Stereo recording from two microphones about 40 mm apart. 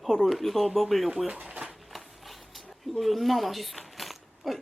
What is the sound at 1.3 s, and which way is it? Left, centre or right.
Speech, right.